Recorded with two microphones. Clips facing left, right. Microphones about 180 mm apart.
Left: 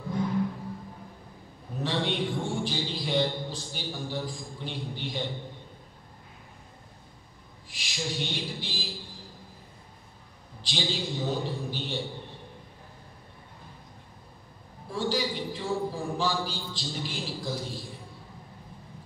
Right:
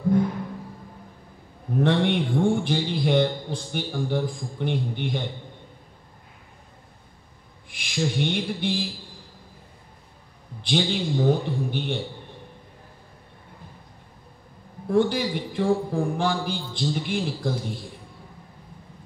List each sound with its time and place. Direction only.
1.8 s a man's voice: 55° right (ahead or behind)
7.7 s a sound: 55° right (ahead or behind)
10.6 s a man's voice: 55° right (ahead or behind)
14.9 s a man's voice: 55° right (ahead or behind)